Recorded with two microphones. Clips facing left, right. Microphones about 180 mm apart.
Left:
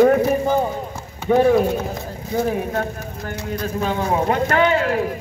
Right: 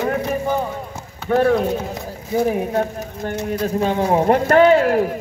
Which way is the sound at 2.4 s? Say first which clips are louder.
Right 3 dB; 15° right (ahead or behind).